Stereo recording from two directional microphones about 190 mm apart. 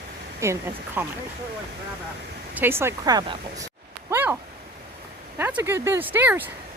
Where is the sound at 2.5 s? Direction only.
10° right (ahead or behind).